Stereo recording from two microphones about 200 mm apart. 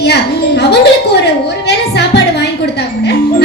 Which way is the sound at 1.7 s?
55° left (ahead or behind).